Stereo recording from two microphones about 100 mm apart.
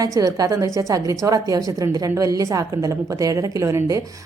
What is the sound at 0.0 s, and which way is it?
A woman's voice, 35° right (ahead or behind).